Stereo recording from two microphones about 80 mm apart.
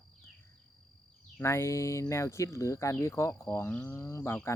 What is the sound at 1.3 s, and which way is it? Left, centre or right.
Cricket, left.